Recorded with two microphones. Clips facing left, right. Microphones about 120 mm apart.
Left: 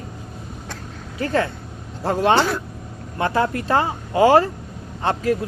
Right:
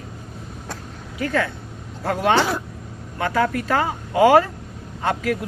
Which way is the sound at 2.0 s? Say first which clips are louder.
Left 1 dB; 25° left (ahead or behind).